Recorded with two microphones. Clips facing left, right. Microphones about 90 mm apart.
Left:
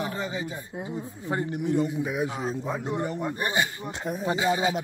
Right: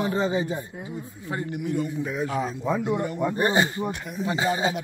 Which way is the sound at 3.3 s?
30° right (ahead or behind).